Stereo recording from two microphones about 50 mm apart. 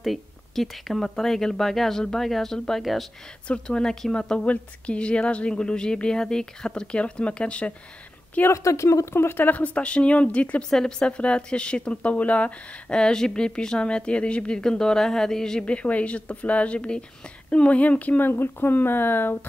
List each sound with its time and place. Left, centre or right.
0.0 s speech: centre
3.4 s a woman's voice: centre
8.5 s speech: left
9.1 s speech: left
9.6 s a woman's voice: left
10.7 s a woman's voice: centre
13.0 s speech: centre
15.6 s a woman's voice: left
18.3 s speech: left